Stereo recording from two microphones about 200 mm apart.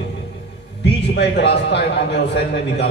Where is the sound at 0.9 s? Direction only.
60° left (ahead or behind).